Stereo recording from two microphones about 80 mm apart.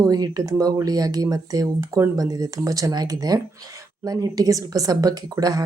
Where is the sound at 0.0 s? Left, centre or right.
Right.